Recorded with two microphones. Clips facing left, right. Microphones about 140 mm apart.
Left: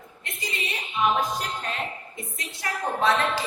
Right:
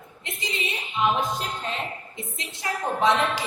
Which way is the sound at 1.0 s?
25° right (ahead or behind).